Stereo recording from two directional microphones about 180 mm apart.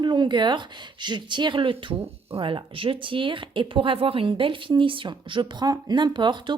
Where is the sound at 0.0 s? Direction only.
25° right (ahead or behind).